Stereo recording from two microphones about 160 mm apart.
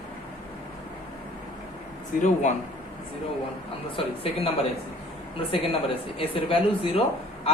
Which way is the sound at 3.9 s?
35° left (ahead or behind).